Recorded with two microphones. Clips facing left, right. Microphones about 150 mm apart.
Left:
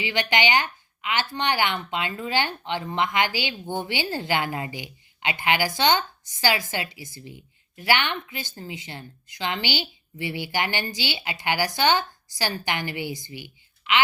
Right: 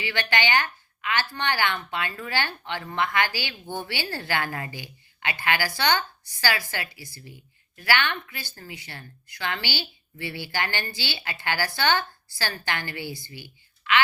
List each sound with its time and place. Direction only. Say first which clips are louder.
0.0 s a woman's voice: left 3 dB; 20° left (ahead or behind)